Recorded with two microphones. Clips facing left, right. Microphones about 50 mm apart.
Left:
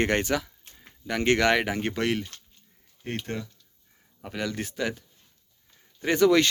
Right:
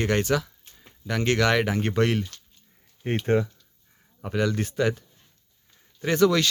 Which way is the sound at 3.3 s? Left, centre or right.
Right.